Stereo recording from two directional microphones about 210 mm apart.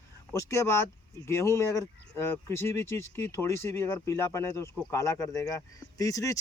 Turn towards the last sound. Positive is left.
turn(degrees=15)  # may be behind; listen again after turning